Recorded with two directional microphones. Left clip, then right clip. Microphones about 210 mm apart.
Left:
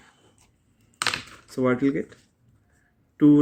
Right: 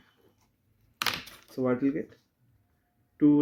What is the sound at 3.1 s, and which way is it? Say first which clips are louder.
Speech: left 5 dB; 40° left (ahead or behind).